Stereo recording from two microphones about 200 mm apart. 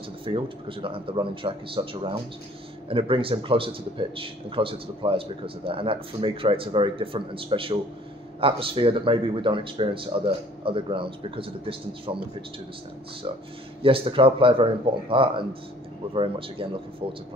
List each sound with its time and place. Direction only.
0.2 s a man's voice: 25° right (ahead or behind)
13.8 s a man's voice: 25° right (ahead or behind)